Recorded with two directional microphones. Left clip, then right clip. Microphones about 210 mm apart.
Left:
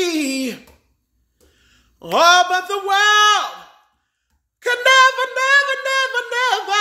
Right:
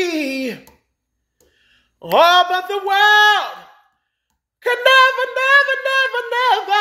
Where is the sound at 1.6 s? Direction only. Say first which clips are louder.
Right 3 dB; 15° left (ahead or behind).